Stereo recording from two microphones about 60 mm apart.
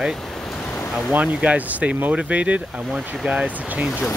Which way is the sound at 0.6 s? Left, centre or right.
Left.